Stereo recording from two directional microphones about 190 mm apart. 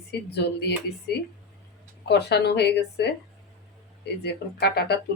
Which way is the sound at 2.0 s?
60° left (ahead or behind).